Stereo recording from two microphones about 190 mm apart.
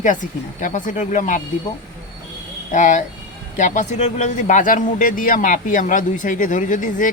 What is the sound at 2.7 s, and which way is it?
Speech, 40° left (ahead or behind).